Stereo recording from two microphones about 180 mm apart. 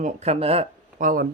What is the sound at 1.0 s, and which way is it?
Speech, 50° right (ahead or behind).